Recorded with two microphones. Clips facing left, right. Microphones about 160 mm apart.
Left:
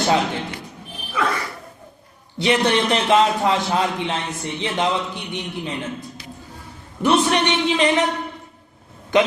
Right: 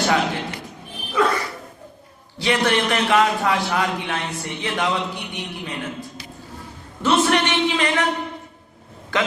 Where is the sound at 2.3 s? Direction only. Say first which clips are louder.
Left 2 dB; 20° left (ahead or behind).